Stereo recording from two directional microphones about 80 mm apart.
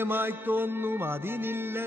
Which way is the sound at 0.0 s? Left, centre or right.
Right.